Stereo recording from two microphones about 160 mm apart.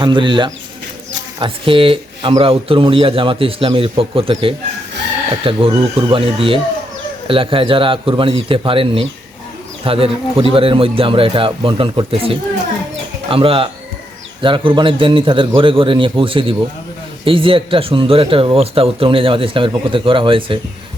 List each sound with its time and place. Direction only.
0.0 s a man's voice: 30° right (ahead or behind)